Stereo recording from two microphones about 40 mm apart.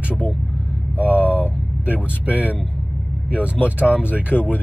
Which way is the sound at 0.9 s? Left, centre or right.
Right.